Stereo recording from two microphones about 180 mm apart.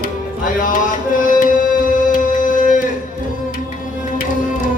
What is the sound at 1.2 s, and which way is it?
Music, 50° left (ahead or behind).